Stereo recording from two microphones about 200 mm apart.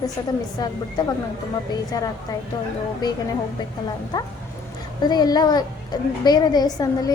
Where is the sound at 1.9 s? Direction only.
20° left (ahead or behind).